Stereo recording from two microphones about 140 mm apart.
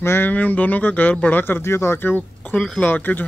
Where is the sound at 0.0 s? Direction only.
15° left (ahead or behind).